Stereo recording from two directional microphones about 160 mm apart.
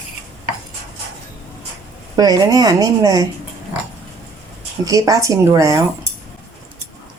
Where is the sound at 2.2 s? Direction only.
25° right (ahead or behind).